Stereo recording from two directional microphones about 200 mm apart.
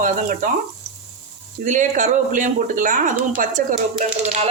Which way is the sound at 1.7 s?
40° right (ahead or behind).